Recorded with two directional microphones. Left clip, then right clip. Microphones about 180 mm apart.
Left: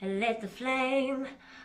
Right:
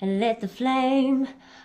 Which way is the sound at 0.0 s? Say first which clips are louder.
Right 6 dB; 35° right (ahead or behind).